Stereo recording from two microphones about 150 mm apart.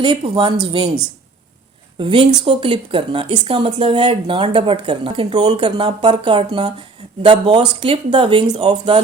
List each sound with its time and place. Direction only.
0.0 s speech: 35° right (ahead or behind)
2.0 s speech: 35° right (ahead or behind)